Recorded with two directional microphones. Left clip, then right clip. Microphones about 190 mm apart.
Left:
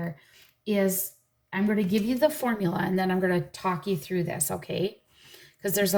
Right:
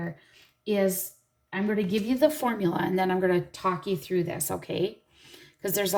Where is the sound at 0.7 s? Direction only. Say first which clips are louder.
Right 1 dB; 20° right (ahead or behind).